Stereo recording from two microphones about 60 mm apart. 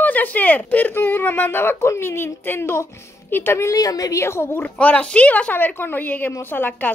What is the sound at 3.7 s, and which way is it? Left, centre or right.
Speech, left.